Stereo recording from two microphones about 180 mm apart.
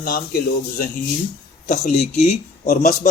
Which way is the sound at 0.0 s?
55° left (ahead or behind).